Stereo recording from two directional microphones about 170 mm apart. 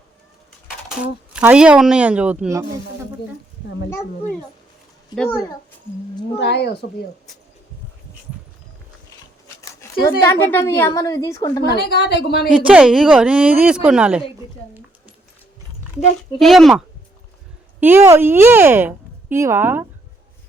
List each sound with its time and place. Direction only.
0.9 s speech: 5° right (ahead or behind)
5.1 s a woman's voice: 5° left (ahead or behind)
6.3 s a woman's voice: 80° left
10.1 s a woman's voice: 15° left (ahead or behind)
11.8 s a woman's voice: 70° left (ahead or behind)
12.5 s a woman's voice: 5° right (ahead or behind)
16.4 s a woman's voice: centre (ahead or behind)
17.7 s speech: 10° right (ahead or behind)